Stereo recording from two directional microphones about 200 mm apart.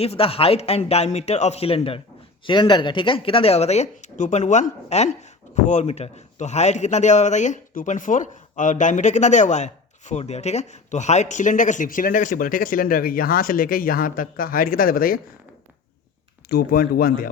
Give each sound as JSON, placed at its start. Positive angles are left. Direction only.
{"t": 0.0, "sound": "a man's voice", "side_deg": 30}
{"t": 16.5, "sound": "speech", "side_deg": 50}